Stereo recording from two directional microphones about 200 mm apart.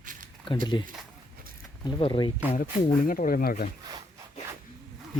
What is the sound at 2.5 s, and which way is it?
Speech, 45° left (ahead or behind).